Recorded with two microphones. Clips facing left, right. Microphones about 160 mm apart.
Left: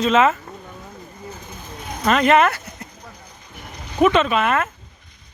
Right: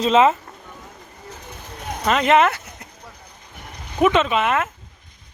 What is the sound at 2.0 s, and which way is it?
Speech, 15° right (ahead or behind).